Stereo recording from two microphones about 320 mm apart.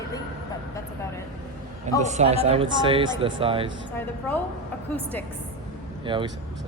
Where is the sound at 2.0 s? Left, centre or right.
Right.